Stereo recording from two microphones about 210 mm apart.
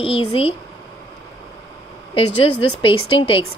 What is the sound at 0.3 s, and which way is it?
Speech, 25° left (ahead or behind).